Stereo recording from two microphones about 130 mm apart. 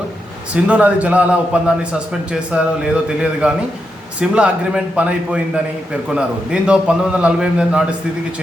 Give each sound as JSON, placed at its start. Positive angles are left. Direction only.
{"t": 0.5, "sound": "a man's voice", "side_deg": -10}